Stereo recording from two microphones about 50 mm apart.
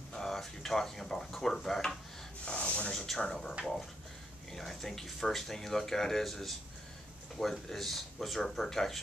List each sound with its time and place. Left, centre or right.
0.1 s dishes: centre
2.4 s a sound: left
3.2 s speech: centre